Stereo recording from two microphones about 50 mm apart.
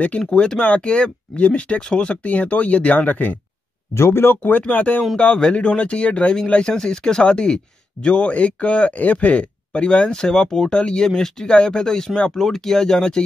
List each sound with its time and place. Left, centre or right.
0.3 s speech: centre; by 3.3 s left
3.9 s speech: left
4.4 s speech: left
5.1 s speech: centre